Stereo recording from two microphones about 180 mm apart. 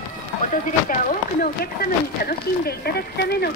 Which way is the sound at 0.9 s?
50° left (ahead or behind).